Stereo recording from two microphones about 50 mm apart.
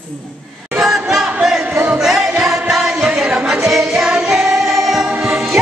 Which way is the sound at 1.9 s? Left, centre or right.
Centre.